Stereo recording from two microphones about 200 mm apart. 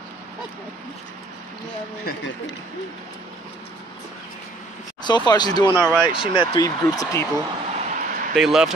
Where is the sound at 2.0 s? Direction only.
65° left (ahead or behind).